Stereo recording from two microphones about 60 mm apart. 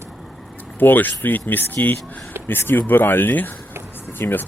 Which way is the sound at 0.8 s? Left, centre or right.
Left.